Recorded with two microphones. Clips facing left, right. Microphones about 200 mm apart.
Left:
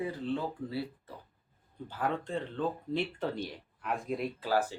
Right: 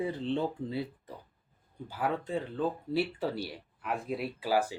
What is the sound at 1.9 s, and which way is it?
Speech, 10° right (ahead or behind).